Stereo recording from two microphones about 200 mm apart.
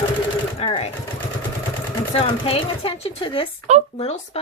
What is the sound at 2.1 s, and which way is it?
Speech, 25° left (ahead or behind).